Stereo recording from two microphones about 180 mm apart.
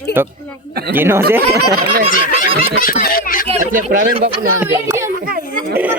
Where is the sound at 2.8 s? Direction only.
50° left (ahead or behind).